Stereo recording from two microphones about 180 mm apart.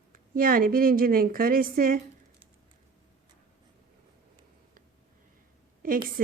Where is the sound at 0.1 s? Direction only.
50° right (ahead or behind).